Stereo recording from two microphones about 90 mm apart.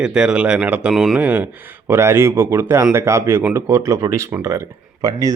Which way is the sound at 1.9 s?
30° right (ahead or behind).